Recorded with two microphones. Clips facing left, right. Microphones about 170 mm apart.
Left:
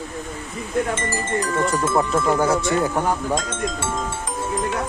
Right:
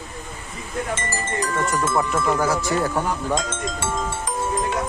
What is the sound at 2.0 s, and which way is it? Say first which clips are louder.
Speech: left 3 dB; 25° left (ahead or behind).